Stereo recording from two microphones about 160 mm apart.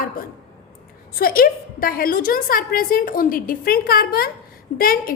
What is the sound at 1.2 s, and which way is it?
A woman's voice, 70° left (ahead or behind).